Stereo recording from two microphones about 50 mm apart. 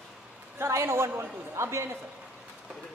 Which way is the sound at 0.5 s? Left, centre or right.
Right.